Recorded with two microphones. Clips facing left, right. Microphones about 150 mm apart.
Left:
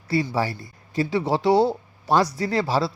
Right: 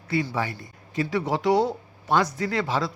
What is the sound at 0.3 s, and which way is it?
Speech, 35° left (ahead or behind).